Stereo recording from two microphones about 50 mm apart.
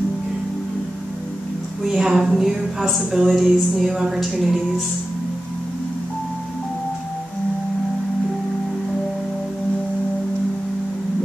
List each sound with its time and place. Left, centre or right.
1.9 s a woman's voice: centre